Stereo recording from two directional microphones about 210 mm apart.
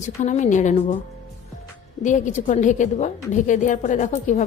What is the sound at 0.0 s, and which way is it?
Speech, 35° left (ahead or behind).